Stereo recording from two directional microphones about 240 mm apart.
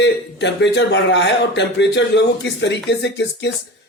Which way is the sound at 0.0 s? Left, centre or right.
Left.